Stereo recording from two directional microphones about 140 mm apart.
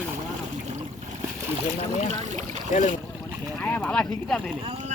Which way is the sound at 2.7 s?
60° left (ahead or behind).